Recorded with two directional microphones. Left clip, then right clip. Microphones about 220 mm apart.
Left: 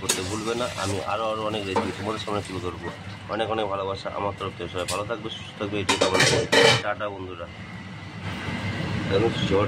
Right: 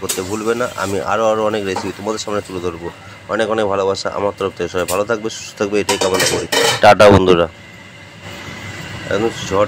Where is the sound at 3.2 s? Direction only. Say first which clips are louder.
Right 10 dB; 30° right (ahead or behind).